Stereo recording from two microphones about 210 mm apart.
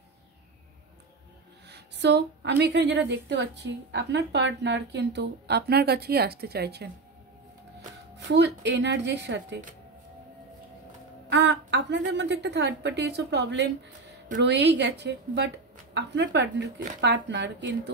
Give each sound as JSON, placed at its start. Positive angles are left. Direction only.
{"t": 1.7, "sound": "a woman's voice", "side_deg": -55}
{"t": 8.3, "sound": "a woman's voice", "side_deg": -55}
{"t": 11.2, "sound": "a woman's voice", "side_deg": -55}